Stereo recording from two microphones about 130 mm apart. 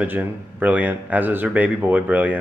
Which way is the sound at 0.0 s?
10° right (ahead or behind).